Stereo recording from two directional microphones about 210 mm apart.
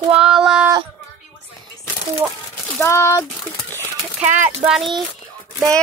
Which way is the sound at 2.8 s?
15° left (ahead or behind).